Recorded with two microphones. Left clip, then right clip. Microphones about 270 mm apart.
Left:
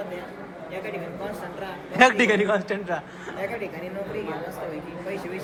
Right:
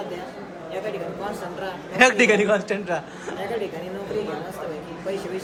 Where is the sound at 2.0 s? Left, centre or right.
Centre.